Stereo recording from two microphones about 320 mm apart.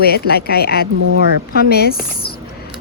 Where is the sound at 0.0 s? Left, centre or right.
Left.